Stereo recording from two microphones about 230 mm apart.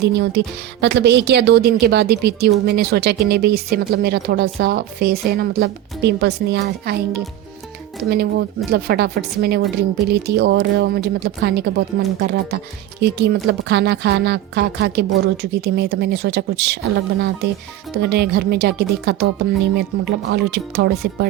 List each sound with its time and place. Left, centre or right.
0.0 s a woman's voice: right
17.9 s a woman's voice: right